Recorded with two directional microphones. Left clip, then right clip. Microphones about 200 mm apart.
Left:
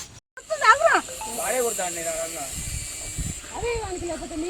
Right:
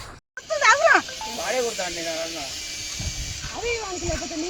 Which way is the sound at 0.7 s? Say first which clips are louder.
Right 1 dB; 50° right (ahead or behind).